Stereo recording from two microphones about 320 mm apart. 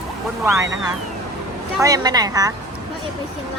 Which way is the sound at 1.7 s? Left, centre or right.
Centre.